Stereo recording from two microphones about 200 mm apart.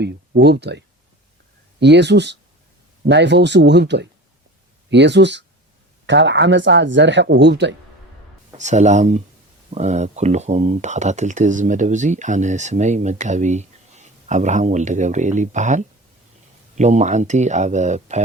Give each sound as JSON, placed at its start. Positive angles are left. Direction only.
{"t": 0.0, "sound": "speech", "side_deg": -55}
{"t": 8.5, "sound": "speech", "side_deg": -35}